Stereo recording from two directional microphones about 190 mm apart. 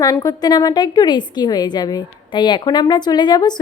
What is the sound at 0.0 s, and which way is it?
A woman's voice, 20° left (ahead or behind).